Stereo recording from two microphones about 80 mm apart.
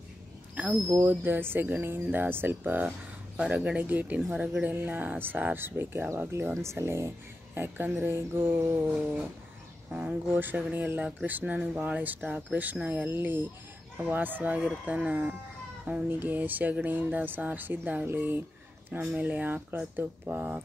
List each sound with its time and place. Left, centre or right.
0.6 s speech: centre; by 7.1 s right
7.5 s speech: right
9.9 s speech: centre
18.9 s speech: centre